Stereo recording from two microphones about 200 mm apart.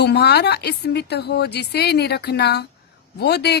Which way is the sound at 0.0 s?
55° left (ahead or behind).